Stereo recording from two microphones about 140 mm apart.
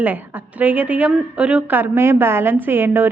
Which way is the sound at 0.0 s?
10° right (ahead or behind).